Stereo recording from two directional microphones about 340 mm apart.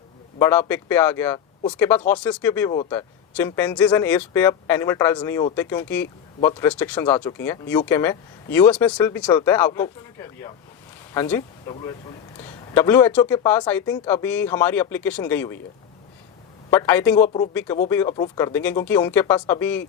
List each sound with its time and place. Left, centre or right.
0.3 s speech: centre
16.6 s speech: centre
17.2 s speech: left
17.5 s speech: centre